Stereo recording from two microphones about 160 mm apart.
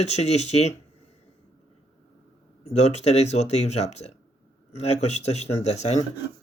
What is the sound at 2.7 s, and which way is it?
Speech, 40° left (ahead or behind).